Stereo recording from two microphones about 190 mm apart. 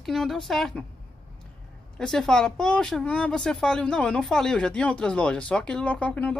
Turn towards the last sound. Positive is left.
turn(degrees=5)  # may be behind; listen again after turning